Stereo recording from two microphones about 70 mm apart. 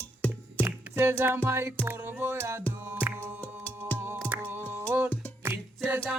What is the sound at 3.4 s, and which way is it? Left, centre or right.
Music, left.